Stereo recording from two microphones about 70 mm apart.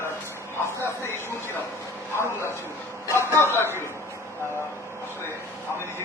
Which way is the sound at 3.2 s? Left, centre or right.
Left.